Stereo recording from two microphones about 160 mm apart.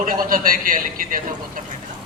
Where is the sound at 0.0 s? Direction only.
60° right (ahead or behind).